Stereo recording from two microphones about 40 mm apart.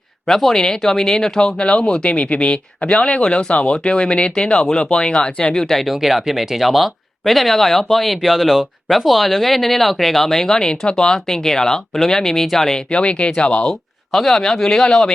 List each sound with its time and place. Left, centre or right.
0.3 s speech: centre
5.6 s speech: centre
5.9 s speech: centre
12.9 s speech: left
13.7 s speech: centre